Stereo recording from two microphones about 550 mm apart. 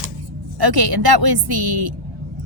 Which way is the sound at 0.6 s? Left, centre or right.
Right.